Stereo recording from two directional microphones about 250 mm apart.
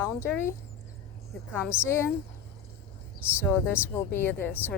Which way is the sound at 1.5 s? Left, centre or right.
Centre.